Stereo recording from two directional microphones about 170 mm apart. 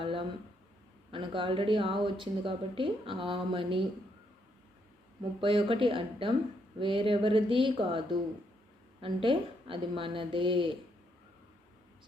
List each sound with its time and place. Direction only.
0.0 s a sound: 30° right (ahead or behind)
1.1 s speech: 30° right (ahead or behind)
5.4 s speech: 30° right (ahead or behind)